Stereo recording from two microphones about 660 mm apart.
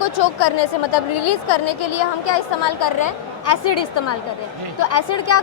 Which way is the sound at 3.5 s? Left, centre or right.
Left.